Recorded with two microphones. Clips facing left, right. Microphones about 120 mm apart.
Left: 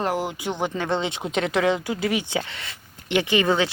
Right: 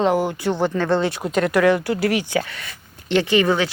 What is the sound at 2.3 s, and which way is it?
Speech, 25° left (ahead or behind).